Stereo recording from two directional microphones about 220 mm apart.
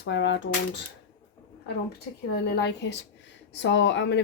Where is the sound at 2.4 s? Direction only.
50° left (ahead or behind).